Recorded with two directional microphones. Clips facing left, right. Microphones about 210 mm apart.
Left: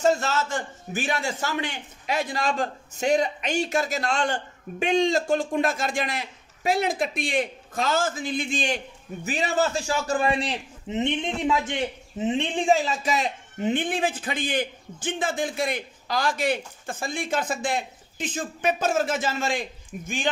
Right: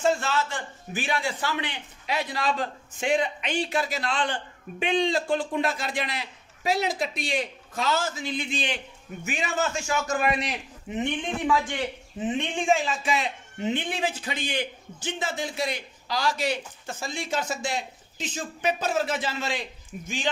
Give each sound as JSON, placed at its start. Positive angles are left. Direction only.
{"t": 0.0, "sound": "a man's voice", "side_deg": 40}